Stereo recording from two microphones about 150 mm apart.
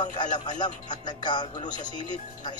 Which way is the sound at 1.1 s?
30° left (ahead or behind).